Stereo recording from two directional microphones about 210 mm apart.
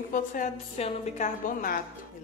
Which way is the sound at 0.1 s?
40° left (ahead or behind).